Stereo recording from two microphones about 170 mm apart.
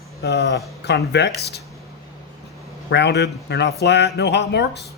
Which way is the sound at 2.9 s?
85° left.